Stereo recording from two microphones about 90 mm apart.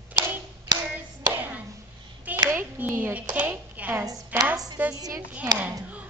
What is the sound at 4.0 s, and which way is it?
A woman's voice, 40° right (ahead or behind).